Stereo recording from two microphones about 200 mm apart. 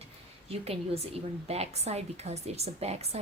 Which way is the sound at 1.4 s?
30° right (ahead or behind).